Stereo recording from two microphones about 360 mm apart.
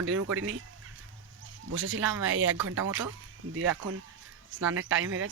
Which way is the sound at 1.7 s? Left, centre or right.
Right.